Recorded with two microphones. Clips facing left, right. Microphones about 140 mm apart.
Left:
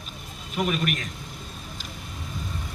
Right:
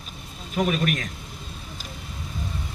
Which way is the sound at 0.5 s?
40° right (ahead or behind).